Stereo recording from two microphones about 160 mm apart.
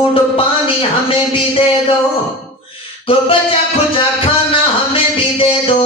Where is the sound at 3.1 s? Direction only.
35° left (ahead or behind).